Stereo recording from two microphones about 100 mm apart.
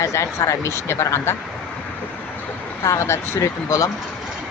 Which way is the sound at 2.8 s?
30° left (ahead or behind).